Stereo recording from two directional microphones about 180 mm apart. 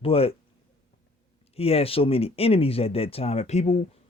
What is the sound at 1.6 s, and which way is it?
Speech, 35° left (ahead or behind).